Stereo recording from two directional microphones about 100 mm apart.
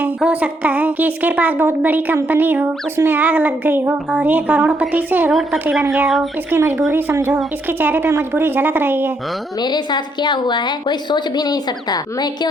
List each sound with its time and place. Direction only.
0.0 s a woman's voice: 10° right (ahead or behind)
5.3 s a woman's voice: centre (ahead or behind)
6.6 s speech: 25° right (ahead or behind)
9.6 s a woman's voice: 45° left (ahead or behind)